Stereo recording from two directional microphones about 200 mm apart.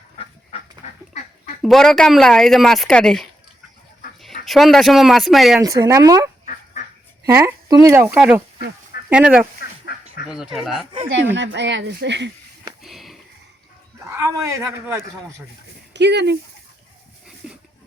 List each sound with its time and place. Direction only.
1.6 s speech: centre (ahead or behind)
4.4 s speech: centre (ahead or behind)
5.5 s speech: 15° right (ahead or behind)
9.6 s fowl: 50° left (ahead or behind)
10.2 s speech: 5° right (ahead or behind)
11.3 s speech: 60° right (ahead or behind)
12.8 s sniff: centre (ahead or behind)
14.1 s speech: 15° right (ahead or behind)
15.9 s speech: 60° right (ahead or behind)
17.2 s a sound: 5° right (ahead or behind)